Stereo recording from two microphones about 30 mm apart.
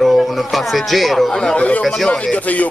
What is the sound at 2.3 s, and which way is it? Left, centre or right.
Speech, left.